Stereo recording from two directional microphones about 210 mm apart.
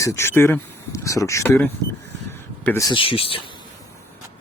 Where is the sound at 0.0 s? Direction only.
15° left (ahead or behind).